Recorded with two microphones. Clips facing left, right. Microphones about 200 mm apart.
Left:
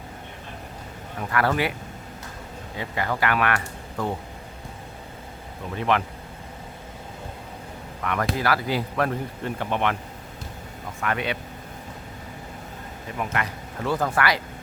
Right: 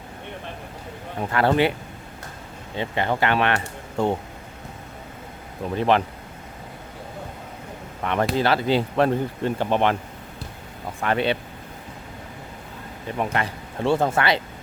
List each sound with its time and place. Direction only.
1.3 s speech: 25° right (ahead or behind)
2.7 s speech: 25° right (ahead or behind)
5.7 s speech: 30° right (ahead or behind)
8.0 s speech: 30° right (ahead or behind)
11.0 s speech: 30° right (ahead or behind)
13.1 s speech: 30° right (ahead or behind)